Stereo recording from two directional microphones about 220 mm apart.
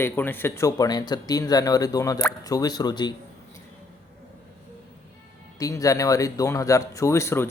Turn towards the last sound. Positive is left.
turn(degrees=10)  # may be behind; listen again after turning